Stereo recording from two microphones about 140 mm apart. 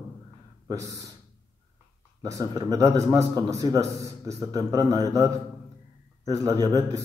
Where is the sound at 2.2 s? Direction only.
25° right (ahead or behind).